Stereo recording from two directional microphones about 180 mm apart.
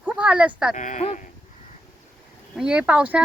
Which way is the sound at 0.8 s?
40° left (ahead or behind).